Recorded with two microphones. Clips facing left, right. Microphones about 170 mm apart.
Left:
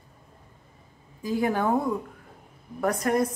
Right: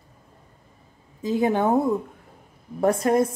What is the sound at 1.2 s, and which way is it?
A woman's voice, 20° right (ahead or behind).